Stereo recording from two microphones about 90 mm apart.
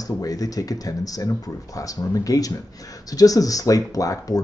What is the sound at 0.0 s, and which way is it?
Speech, 40° left (ahead or behind).